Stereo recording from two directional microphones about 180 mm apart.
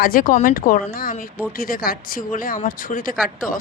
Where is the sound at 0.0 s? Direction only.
50° left (ahead or behind).